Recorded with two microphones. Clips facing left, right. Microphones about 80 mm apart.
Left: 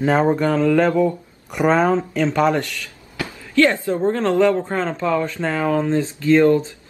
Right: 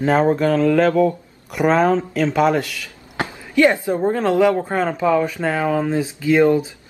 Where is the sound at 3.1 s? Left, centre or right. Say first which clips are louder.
Even; right.